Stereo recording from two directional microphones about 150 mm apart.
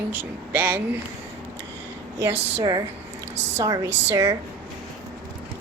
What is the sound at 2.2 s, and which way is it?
A woman's voice, 20° right (ahead or behind).